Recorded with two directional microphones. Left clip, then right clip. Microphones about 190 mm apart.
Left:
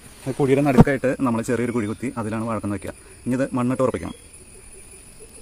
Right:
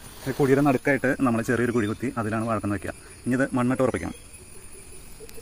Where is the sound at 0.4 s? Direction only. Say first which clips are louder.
Left 3 dB; 20° left (ahead or behind).